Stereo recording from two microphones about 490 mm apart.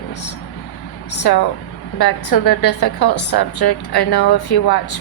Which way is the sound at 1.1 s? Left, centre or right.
Left.